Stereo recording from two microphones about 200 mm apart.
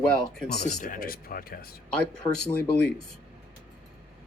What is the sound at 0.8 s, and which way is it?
Speech, 45° left (ahead or behind).